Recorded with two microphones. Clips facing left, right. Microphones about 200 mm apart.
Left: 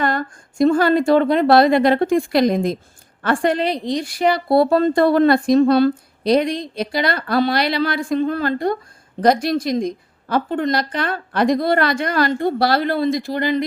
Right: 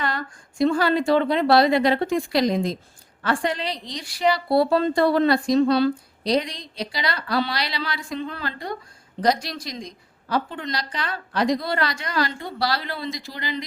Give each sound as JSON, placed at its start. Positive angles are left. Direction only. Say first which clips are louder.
{"t": 0.0, "sound": "a woman's voice", "louder": "left 7 dB", "side_deg": 50}